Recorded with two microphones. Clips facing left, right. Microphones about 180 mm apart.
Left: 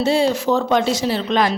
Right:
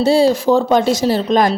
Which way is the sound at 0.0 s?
35° right (ahead or behind).